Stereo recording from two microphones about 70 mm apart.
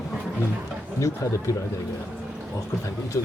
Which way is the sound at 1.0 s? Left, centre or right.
Left.